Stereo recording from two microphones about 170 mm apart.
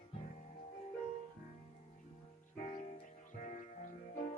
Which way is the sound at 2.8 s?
50° left (ahead or behind).